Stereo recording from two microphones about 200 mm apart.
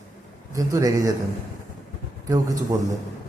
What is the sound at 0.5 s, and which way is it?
Speech, 15° right (ahead or behind).